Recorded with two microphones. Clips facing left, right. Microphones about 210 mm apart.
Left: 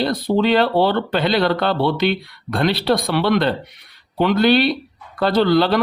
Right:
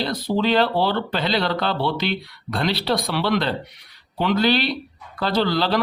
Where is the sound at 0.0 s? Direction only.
55° left (ahead or behind).